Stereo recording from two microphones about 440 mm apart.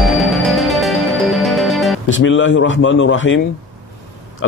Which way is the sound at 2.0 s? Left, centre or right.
Left.